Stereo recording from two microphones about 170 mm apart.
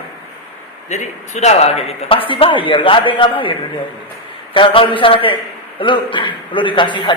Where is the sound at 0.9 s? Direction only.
45° left (ahead or behind).